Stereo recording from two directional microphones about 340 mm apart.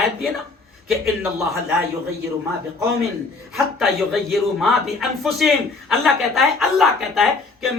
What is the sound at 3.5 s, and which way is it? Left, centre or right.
A man's voice, centre.